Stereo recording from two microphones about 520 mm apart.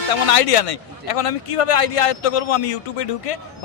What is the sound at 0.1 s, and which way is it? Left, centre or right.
A man's voice, left.